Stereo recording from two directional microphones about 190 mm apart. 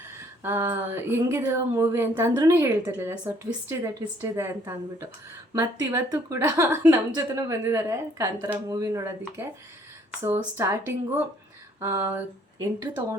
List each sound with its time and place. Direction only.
0.4 s speech: 15° right (ahead or behind)